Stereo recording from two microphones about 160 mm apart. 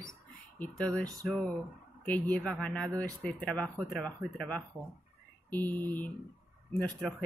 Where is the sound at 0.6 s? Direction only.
5° left (ahead or behind).